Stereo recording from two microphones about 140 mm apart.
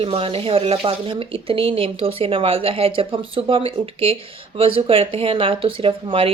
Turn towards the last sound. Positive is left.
turn(degrees=-40)  # may be behind; listen again after turning